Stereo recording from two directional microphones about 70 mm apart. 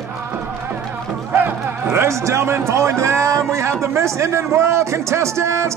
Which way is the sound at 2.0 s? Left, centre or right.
Right.